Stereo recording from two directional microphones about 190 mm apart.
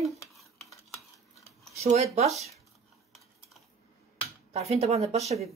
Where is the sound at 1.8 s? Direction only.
35° right (ahead or behind).